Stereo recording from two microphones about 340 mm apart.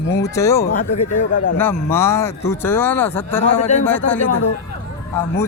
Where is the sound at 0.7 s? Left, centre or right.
Left.